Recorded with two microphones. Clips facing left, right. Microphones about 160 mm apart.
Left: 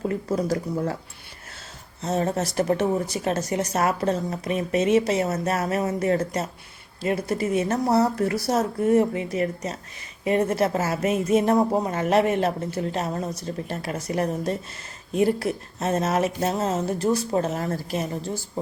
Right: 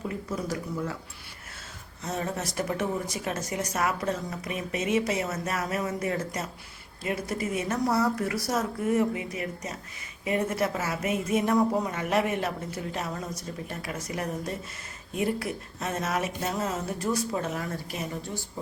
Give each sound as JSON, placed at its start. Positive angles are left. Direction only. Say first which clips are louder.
{"t": 0.0, "sound": "a woman's voice", "louder": "left 7 dB", "side_deg": 35}
{"t": 2.0, "sound": "a woman's voice", "louder": "left 7 dB", "side_deg": 35}
{"t": 11.1, "sound": "a woman's voice", "louder": "left 5 dB", "side_deg": 30}
{"t": 16.6, "sound": "a woman's voice", "louder": "left 6 dB", "side_deg": 25}